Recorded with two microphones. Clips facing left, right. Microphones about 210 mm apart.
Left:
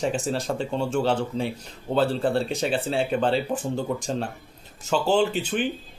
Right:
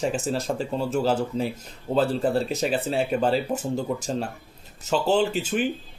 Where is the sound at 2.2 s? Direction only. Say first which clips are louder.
Even; 5° right (ahead or behind).